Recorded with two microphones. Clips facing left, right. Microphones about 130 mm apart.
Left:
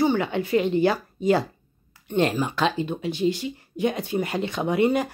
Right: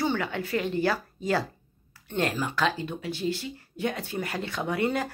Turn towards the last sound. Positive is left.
turn(degrees=20)  # may be behind; listen again after turning